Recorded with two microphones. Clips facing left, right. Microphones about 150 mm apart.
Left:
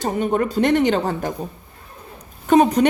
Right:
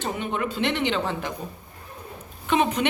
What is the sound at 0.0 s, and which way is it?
Speech, 40° left (ahead or behind).